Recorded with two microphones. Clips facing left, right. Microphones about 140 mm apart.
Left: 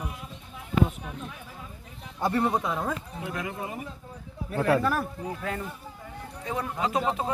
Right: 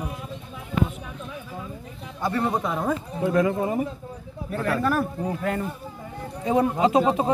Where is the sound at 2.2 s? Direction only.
20° left (ahead or behind).